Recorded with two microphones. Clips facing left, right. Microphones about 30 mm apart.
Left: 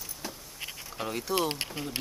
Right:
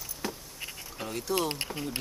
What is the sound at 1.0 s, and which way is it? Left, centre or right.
Speech, centre.